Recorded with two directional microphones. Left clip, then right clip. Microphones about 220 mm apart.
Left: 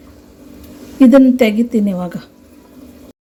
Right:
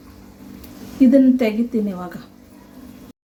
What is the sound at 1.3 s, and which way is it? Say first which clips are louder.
Speech: left 6 dB; 35° left (ahead or behind).